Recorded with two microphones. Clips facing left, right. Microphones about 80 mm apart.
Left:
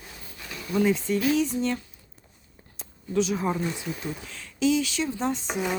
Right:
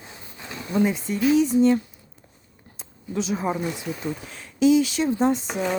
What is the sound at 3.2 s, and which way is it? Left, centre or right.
Speech, centre.